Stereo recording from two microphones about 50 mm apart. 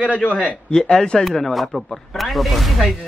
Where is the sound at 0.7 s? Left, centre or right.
Centre.